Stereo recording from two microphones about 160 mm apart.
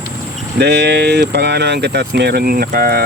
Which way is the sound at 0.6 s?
90° right.